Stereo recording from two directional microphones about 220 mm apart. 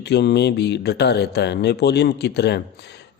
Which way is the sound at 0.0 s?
50° left (ahead or behind).